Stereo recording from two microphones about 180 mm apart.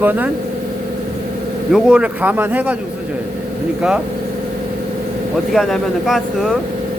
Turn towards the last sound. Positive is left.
turn(degrees=0)  # may be behind; listen again after turning